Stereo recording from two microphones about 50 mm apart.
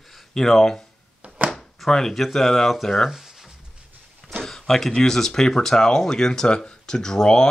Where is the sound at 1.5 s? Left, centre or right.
Centre.